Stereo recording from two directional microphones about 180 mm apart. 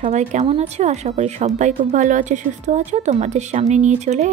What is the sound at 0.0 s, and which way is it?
A woman's voice, 40° right (ahead or behind).